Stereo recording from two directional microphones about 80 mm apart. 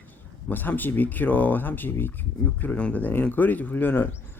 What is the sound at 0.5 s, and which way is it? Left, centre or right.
Speech, left.